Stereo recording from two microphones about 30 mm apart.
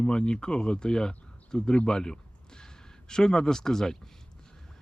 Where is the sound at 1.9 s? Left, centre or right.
Left.